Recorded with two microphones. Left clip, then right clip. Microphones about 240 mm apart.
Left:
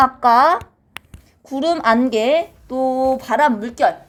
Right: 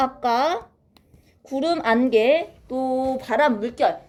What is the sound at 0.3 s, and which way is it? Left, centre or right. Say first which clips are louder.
A woman's voice: left 9 dB; left.